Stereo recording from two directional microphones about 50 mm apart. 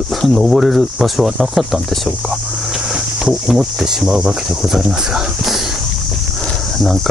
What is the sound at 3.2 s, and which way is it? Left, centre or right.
Speech, centre.